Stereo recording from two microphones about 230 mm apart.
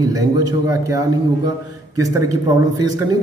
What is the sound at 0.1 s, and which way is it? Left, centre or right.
Speech, centre.